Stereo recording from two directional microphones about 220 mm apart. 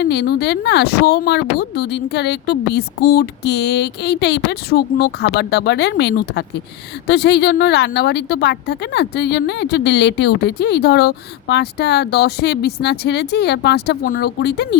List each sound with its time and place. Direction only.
0.0 s a woman's voice: 50° left (ahead or behind)